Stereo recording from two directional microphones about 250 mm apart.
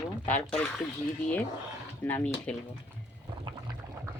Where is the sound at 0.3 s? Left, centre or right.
Centre.